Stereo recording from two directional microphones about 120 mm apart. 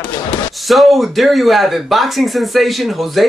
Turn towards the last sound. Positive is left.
turn(degrees=0)  # may be behind; listen again after turning